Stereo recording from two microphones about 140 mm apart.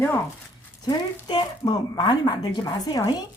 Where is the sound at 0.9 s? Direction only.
30° left (ahead or behind).